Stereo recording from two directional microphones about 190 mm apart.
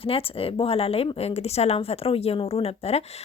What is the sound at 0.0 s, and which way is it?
Speech, 30° left (ahead or behind).